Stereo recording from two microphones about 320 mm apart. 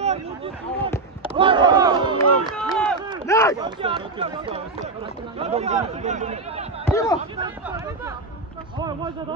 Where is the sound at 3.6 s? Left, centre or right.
Centre.